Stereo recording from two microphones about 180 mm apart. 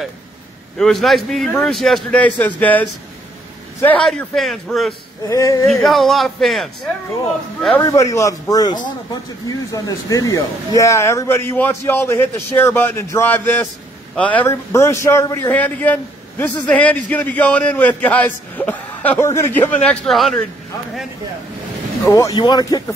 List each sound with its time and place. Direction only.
0.7 s a man's voice: centre (ahead or behind)
5.3 s a man's voice: 20° left (ahead or behind)
5.7 s a man's voice: centre (ahead or behind)
7.8 s a man's voice: 20° left (ahead or behind); by 20.4 s centre (ahead or behind)
22.0 s a man's voice: 15° left (ahead or behind)